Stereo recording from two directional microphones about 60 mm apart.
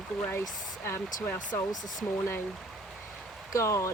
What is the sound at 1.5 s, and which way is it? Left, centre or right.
Speech, left.